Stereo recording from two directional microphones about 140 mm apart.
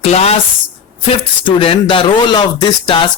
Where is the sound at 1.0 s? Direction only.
40° left (ahead or behind).